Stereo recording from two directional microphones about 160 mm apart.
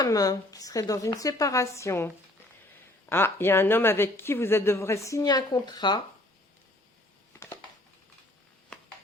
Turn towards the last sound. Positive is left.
turn(degrees=20)  # may be behind; listen again after turning